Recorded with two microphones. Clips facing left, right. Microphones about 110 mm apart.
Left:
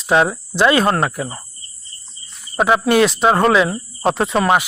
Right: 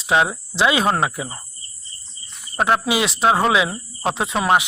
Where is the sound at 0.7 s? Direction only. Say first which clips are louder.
Left 3 dB; 15° right (ahead or behind).